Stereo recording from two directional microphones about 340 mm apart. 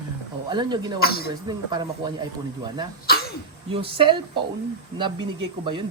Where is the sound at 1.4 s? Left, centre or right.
Centre.